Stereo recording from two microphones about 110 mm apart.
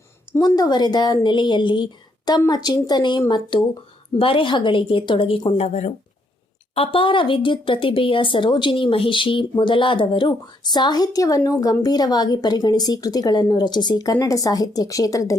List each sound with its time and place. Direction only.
0.4 s a woman's voice: 40° left (ahead or behind)
5.5 s speech: 85° left
6.7 s speech: 55° left (ahead or behind); by 15.4 s 35° left (ahead or behind)